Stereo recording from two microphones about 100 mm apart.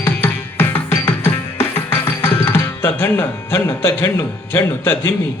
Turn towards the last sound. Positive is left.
turn(degrees=25)  # may be behind; listen again after turning